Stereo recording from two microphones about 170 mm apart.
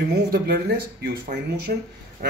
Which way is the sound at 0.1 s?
65° right (ahead or behind).